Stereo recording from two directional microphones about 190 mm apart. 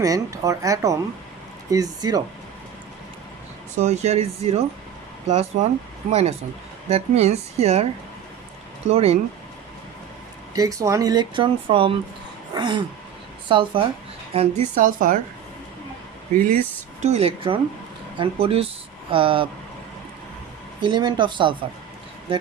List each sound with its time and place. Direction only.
0.0 s speech: 15° right (ahead or behind)
3.8 s speech: 35° right (ahead or behind)
8.9 s speech: 35° right (ahead or behind)
10.5 s speech: 20° right (ahead or behind)
12.5 s a sound: 25° right (ahead or behind)
13.5 s speech: 25° right (ahead or behind)
14.3 s a woman's voice: 40° right (ahead or behind)
16.3 s a woman's voice: 45° right (ahead or behind)
17.0 s speech: 35° right (ahead or behind)
20.8 s speech: 25° right (ahead or behind)